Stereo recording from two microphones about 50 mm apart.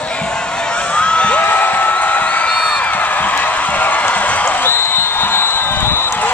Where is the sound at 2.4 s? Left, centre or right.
Left.